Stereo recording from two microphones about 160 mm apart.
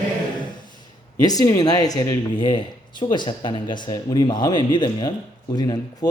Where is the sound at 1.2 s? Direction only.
25° left (ahead or behind).